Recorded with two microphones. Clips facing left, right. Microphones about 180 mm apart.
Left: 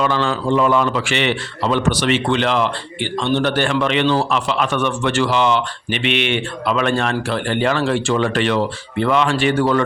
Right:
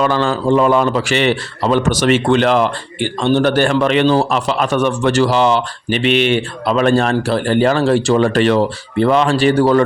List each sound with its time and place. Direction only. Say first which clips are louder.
0.0 s a man's voice: right 3 dB; 45° right (ahead or behind)